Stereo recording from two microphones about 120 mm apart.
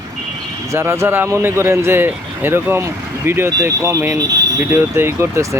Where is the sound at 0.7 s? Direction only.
20° right (ahead or behind).